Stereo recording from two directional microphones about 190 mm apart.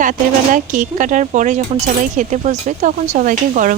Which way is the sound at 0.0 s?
45° right (ahead or behind).